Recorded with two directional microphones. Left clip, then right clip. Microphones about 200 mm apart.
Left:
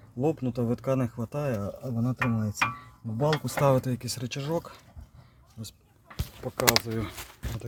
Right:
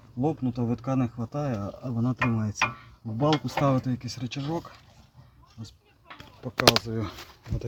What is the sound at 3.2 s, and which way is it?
Speech, 60° left (ahead or behind).